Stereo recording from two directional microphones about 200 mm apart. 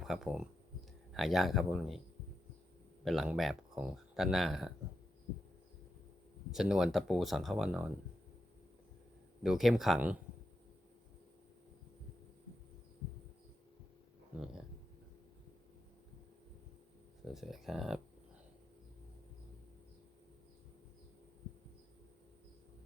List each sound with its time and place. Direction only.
0.0 s speech: centre (ahead or behind)
3.0 s speech: centre (ahead or behind)
6.5 s speech: centre (ahead or behind)
9.4 s speech: centre (ahead or behind)
17.3 s speech: centre (ahead or behind)